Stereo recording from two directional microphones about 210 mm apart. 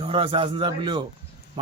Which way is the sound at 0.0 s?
25° right (ahead or behind).